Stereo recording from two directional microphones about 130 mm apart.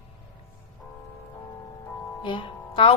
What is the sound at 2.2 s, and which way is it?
Music, 40° left (ahead or behind).